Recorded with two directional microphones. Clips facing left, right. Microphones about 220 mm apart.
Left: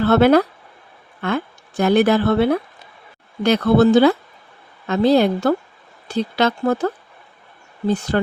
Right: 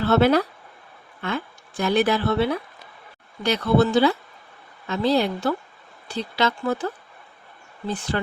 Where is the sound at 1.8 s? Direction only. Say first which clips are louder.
Left 6 dB; 55° left (ahead or behind).